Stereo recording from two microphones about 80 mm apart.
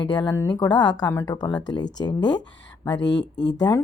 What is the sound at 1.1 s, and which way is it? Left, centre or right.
Speech, left.